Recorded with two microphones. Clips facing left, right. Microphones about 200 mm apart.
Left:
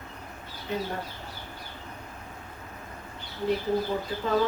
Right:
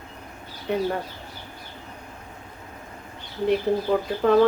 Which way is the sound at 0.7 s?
60° right (ahead or behind).